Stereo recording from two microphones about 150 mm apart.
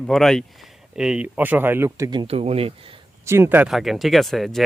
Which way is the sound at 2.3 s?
40° right (ahead or behind).